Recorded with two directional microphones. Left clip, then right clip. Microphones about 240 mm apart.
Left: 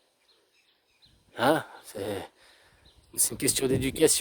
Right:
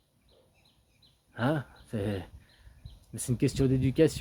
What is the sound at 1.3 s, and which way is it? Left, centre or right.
Speech, left.